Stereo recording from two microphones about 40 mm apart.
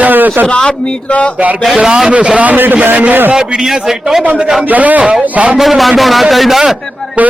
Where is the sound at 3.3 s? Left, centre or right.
Centre.